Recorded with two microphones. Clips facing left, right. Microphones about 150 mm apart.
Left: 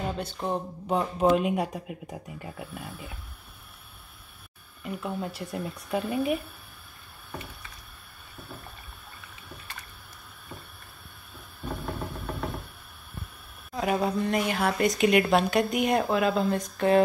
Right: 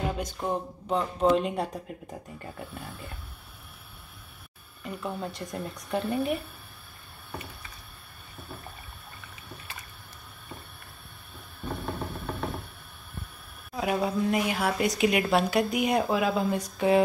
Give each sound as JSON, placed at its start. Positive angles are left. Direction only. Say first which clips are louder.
{"t": 0.1, "sound": "a sound", "louder": "even", "side_deg": -10}
{"t": 0.8, "sound": "speech", "louder": "left 1 dB", "side_deg": 5}
{"t": 4.8, "sound": "speech", "louder": "left 1 dB", "side_deg": 0}
{"t": 11.8, "sound": "vehicle", "louder": "even", "side_deg": 0}
{"t": 13.7, "sound": "speech", "louder": "left 1 dB", "side_deg": 0}